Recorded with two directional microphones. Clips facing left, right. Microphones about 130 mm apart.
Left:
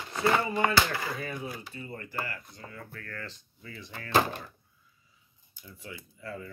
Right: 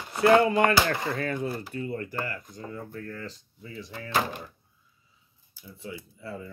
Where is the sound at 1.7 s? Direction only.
50° right (ahead or behind).